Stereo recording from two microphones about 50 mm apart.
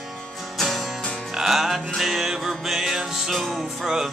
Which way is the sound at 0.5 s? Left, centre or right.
Centre.